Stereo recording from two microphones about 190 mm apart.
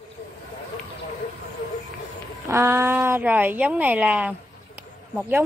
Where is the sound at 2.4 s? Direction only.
15° right (ahead or behind).